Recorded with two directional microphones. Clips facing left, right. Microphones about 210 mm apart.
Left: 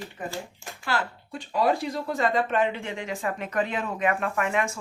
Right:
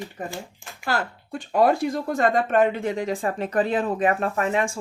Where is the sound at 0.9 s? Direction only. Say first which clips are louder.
Right 3 dB; 45° right (ahead or behind).